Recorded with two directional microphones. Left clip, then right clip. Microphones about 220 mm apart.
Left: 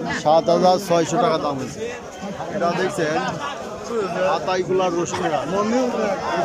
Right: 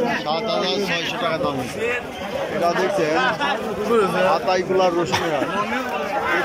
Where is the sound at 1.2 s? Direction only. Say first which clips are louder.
Left 2 dB; 15° left (ahead or behind).